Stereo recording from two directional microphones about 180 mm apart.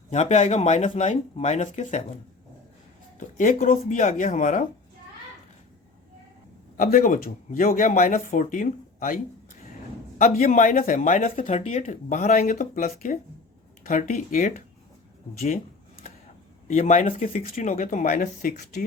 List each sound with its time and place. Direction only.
0.1 s speech: 40° left (ahead or behind)
3.2 s speech: 45° left (ahead or behind)
6.7 s speech: 50° left (ahead or behind)
15.4 s a sound: 45° left (ahead or behind)
16.6 s speech: 40° left (ahead or behind)